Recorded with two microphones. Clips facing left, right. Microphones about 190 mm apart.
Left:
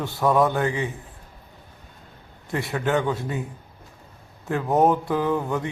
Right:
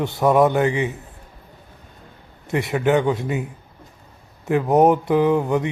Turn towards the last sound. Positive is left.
turn(degrees=-20)  # may be behind; listen again after turning